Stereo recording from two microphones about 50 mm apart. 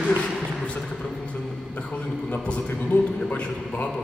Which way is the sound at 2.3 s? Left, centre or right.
Left.